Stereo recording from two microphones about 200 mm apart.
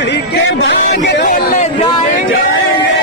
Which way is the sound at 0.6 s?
55° left (ahead or behind).